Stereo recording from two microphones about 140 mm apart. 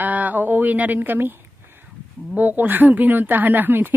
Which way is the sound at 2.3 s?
15° right (ahead or behind).